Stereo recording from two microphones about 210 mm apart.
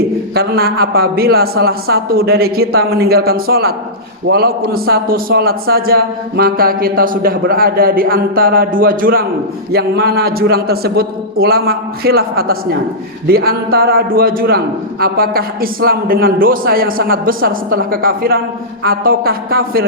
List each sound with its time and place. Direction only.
0.3 s a man's voice: 45° right (ahead or behind)